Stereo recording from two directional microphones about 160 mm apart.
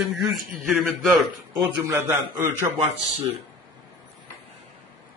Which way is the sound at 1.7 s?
15° right (ahead or behind).